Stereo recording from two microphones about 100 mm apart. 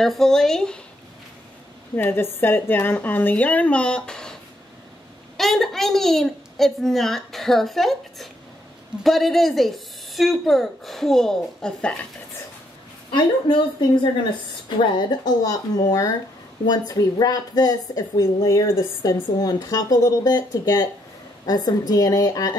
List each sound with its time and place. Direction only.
0.0 s a woman's voice: 5° left (ahead or behind)
2.0 s a woman's voice: 20° left (ahead or behind); by 4.4 s 5° left (ahead or behind)
5.4 s a woman's voice: centre (ahead or behind)
13.1 s speech: 50° left (ahead or behind)
15.0 s speech: 40° left (ahead or behind)